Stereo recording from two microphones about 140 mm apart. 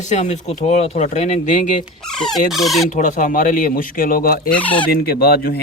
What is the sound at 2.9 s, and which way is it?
Speech, 65° left (ahead or behind).